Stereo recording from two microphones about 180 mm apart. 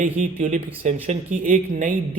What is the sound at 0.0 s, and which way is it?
Speech, 40° right (ahead or behind).